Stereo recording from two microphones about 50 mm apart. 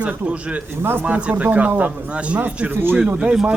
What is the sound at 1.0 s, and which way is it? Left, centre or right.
Speech, right.